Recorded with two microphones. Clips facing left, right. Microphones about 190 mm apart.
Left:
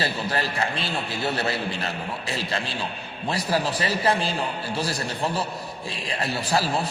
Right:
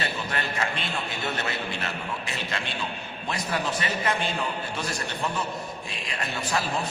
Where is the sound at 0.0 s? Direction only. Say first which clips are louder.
Left 4 dB; 35° left (ahead or behind).